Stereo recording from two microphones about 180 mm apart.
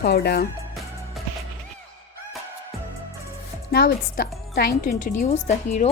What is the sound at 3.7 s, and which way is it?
Speech, 60° left (ahead or behind).